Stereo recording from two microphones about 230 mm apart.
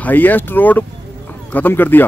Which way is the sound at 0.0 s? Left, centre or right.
Centre.